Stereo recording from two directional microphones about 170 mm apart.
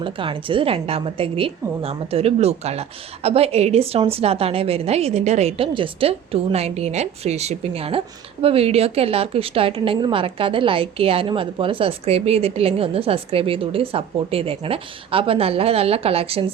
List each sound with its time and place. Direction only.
0.0 s a woman's voice: 30° right (ahead or behind)